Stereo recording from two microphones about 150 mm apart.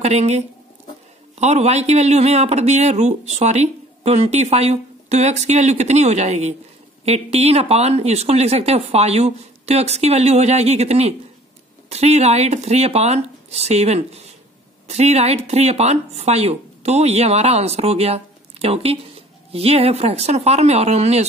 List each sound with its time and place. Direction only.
0.0 s speech: 45° right (ahead or behind)
1.4 s speech: 50° right (ahead or behind)